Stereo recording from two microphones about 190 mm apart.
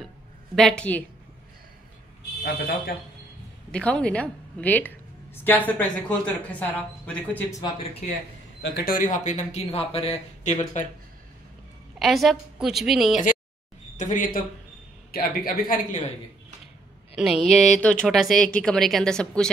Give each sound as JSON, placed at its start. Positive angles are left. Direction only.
{"t": 0.6, "sound": "speech", "side_deg": 5}
{"t": 2.4, "sound": "a woman's voice", "side_deg": 50}
{"t": 3.7, "sound": "a woman's voice", "side_deg": 5}
{"t": 8.6, "sound": "speech", "side_deg": 55}
{"t": 12.0, "sound": "speech", "side_deg": 0}
{"t": 13.9, "sound": "a woman's voice", "side_deg": 40}
{"t": 17.1, "sound": "speech", "side_deg": 0}